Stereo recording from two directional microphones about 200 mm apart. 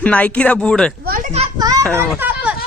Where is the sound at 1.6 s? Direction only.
15° right (ahead or behind).